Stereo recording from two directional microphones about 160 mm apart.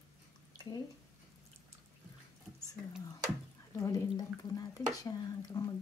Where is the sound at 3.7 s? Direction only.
20° left (ahead or behind).